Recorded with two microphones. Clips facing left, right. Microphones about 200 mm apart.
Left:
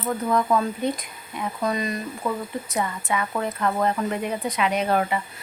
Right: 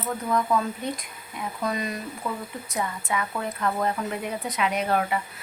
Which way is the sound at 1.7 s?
Centre (ahead or behind).